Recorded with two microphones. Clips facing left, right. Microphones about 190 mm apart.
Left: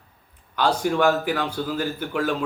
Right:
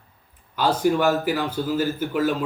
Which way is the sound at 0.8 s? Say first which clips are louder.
Right 2 dB; 5° right (ahead or behind).